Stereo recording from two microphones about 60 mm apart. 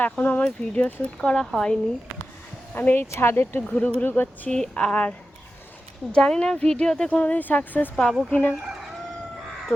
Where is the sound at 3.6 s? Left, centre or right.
Left.